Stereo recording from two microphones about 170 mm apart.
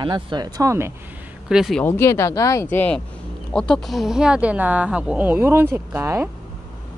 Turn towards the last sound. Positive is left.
turn(degrees=-15)  # may be behind; listen again after turning